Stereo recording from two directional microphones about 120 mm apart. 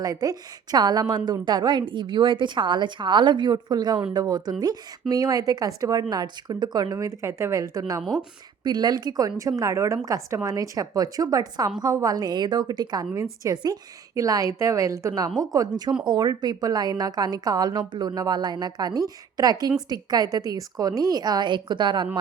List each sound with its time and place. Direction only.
0.0 s a woman's voice: 30° right (ahead or behind)